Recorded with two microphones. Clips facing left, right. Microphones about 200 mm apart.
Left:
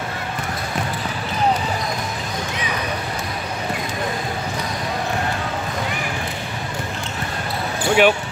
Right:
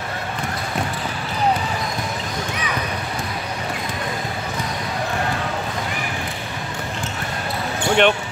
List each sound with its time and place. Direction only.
7.8 s basketball bounce: 5° left (ahead or behind)